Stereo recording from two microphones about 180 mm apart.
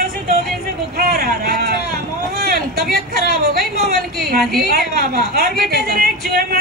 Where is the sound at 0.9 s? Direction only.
55° right (ahead or behind).